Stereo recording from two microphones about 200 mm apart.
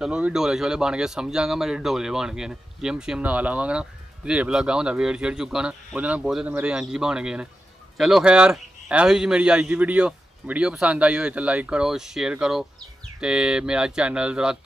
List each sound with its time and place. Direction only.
0.0 s a man's voice: 5° right (ahead or behind)